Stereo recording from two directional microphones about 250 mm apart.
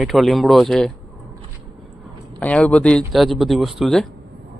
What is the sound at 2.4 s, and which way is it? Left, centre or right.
Speech, centre.